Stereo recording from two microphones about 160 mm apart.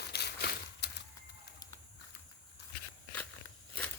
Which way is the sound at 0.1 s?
90° left.